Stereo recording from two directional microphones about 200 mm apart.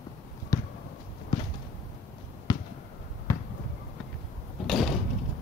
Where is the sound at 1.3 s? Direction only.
20° left (ahead or behind).